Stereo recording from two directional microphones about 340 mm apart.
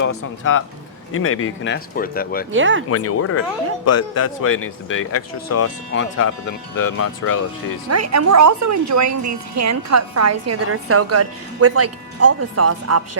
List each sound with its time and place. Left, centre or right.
0.0 s speech: left
2.5 s speech: right
2.9 s speech: left
7.9 s a woman's voice: right